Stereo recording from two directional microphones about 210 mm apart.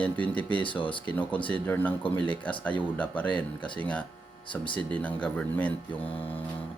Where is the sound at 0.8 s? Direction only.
25° left (ahead or behind).